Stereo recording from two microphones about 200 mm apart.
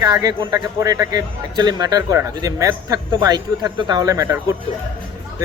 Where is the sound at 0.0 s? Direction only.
20° right (ahead or behind).